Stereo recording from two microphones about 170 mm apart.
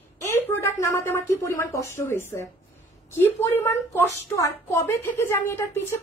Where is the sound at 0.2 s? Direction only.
15° left (ahead or behind).